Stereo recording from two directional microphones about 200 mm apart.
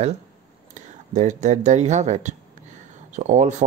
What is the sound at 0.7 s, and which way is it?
Speech, 40° right (ahead or behind).